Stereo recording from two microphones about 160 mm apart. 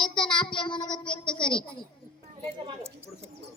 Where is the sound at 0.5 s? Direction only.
30° left (ahead or behind).